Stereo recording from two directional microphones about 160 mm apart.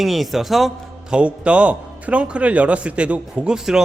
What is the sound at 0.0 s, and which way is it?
Speech, centre (ahead or behind).